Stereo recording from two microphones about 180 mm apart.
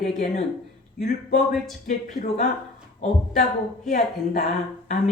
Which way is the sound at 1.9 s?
40° left (ahead or behind).